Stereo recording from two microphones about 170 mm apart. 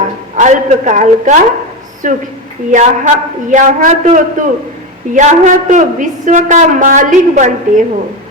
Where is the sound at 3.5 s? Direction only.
50° right (ahead or behind).